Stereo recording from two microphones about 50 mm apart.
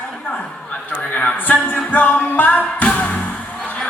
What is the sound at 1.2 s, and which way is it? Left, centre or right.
Music, left.